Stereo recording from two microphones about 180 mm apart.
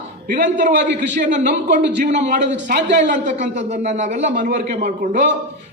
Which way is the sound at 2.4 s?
75° right (ahead or behind).